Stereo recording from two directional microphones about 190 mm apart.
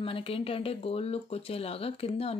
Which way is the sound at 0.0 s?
30° left (ahead or behind).